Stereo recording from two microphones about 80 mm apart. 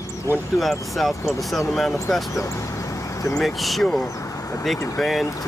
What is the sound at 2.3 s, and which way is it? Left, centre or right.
Vehicle, left.